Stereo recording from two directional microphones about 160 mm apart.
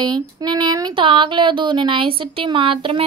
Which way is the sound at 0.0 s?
25° right (ahead or behind).